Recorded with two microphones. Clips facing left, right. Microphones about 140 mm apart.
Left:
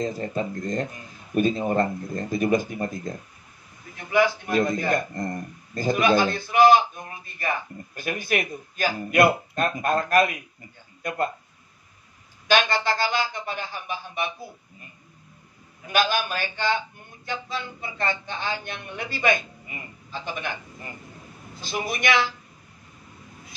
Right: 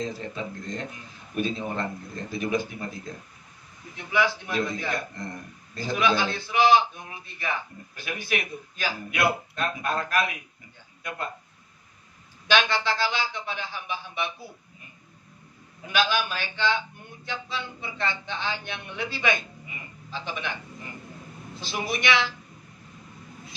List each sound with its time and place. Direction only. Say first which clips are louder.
0.0 s a man's voice: left 5 dB; 45° left (ahead or behind)
12.4 s speech: left 2 dB; 45° left (ahead or behind)
15.9 s a man's voice: left 2 dB; 45° left (ahead or behind)
21.5 s a man's voice: left 1 dB; 45° left (ahead or behind)